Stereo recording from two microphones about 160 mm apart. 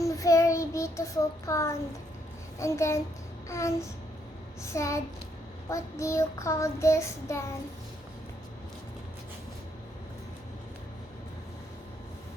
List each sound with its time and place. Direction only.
0.0 s child singing: 20° left (ahead or behind)
3.5 s a sound: 20° left (ahead or behind)
4.6 s child singing: 20° left (ahead or behind)